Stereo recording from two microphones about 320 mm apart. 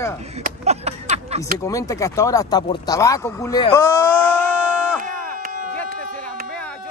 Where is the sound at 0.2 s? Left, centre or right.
Centre.